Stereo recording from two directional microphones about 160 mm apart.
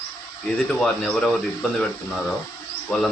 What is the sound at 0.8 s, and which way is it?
Speech, 5° left (ahead or behind).